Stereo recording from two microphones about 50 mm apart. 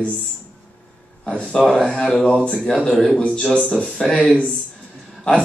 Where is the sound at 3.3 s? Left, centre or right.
Centre.